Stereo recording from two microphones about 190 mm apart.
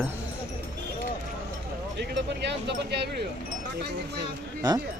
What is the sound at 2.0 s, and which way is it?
Speech, 65° right (ahead or behind).